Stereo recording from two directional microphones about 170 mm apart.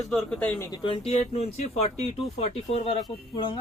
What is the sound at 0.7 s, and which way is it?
Speech, 30° left (ahead or behind).